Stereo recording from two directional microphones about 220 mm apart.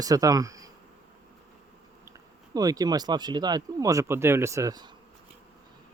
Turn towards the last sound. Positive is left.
turn(degrees=-15)  # may be behind; listen again after turning